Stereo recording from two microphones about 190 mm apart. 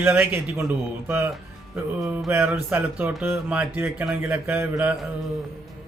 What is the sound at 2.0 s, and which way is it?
Speech, centre (ahead or behind).